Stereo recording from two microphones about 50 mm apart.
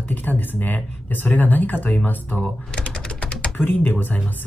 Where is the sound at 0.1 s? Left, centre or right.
Left.